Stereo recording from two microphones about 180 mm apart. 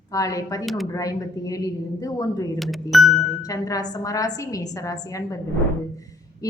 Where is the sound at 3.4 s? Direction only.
20° left (ahead or behind).